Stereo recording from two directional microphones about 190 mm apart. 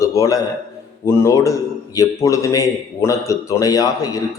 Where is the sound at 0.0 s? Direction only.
15° left (ahead or behind).